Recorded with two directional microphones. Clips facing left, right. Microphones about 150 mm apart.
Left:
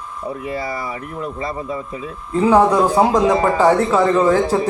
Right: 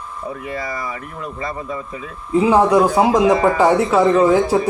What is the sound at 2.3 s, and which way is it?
Speech, 10° right (ahead or behind).